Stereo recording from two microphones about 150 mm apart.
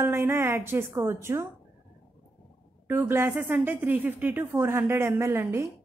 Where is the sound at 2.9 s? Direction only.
15° right (ahead or behind).